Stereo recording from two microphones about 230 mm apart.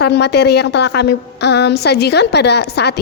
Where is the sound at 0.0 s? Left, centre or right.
Left.